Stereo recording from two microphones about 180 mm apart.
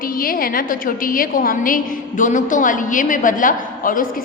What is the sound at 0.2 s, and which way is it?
A woman's voice, 55° left (ahead or behind).